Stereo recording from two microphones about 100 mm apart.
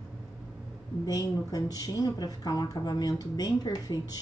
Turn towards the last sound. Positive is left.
turn(degrees=40)  # may be behind; listen again after turning